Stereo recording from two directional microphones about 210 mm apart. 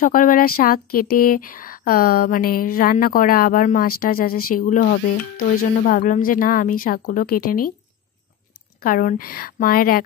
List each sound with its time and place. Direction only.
0.0 s a woman's voice: 40° left (ahead or behind)
8.7 s speech: 45° left (ahead or behind)